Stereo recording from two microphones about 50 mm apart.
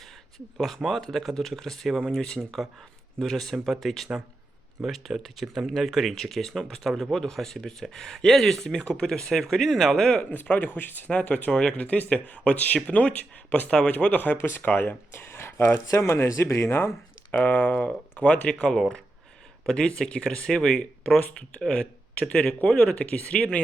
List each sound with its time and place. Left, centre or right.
0.9 s speech: centre
2.4 s speech: centre
10.8 s speech: left
11.1 s speech: left
13.9 s speech: left
14.3 s speech: left
14.6 s speech: left
15.9 s speech: left
17.3 s speech: left
20.5 s speech: centre
21.7 s a man's voice: left